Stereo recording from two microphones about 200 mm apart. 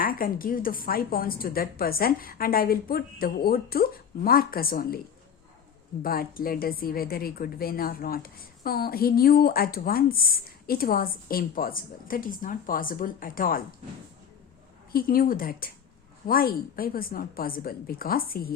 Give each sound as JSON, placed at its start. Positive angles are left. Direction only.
{"t": 0.0, "sound": "a woman's voice", "side_deg": 45}
{"t": 6.0, "sound": "a woman's voice", "side_deg": 45}
{"t": 14.9, "sound": "a woman's voice", "side_deg": 45}